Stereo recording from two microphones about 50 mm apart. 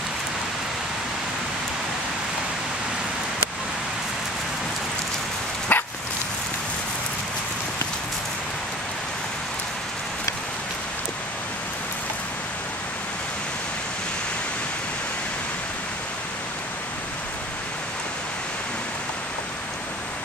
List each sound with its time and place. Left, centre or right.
5.7 s dog: left